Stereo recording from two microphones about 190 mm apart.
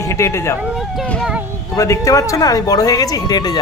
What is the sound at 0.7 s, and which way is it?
Speech, centre (ahead or behind).